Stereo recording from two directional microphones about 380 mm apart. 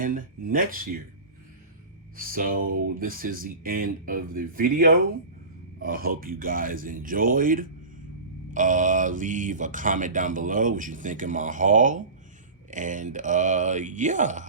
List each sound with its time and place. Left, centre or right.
0.0 s speech: right
2.1 s speech: right